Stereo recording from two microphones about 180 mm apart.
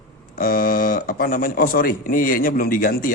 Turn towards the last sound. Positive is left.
turn(degrees=50)  # may be behind; listen again after turning